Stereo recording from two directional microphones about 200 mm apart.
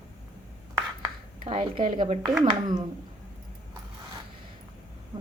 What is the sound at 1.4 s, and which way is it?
Speech, 25° right (ahead or behind).